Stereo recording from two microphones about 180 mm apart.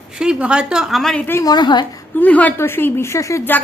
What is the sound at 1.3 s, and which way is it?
Speech, 20° left (ahead or behind).